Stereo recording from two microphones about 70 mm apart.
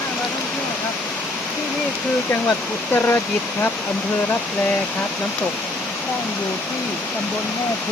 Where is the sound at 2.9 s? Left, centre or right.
Left.